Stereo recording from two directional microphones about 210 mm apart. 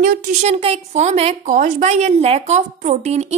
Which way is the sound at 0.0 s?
40° right (ahead or behind).